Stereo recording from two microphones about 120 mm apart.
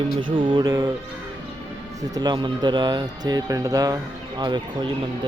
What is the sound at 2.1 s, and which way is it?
Speech, 35° right (ahead or behind).